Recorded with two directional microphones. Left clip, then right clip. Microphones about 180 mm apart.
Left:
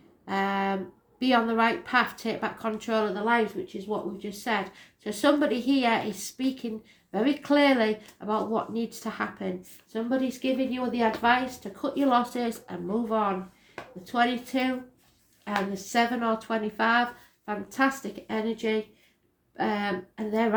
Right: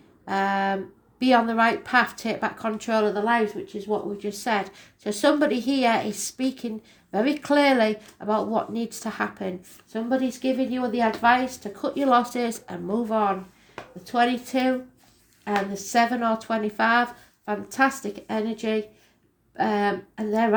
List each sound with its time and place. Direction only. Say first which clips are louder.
0.3 s a sound: right 4 dB; 45° right (ahead or behind)
1.2 s a woman's voice: right 4 dB; 40° right (ahead or behind)
15.7 s a woman's voice: right 4 dB; 35° right (ahead or behind)